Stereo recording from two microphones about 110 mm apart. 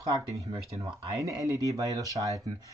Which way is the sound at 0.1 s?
35° right (ahead or behind).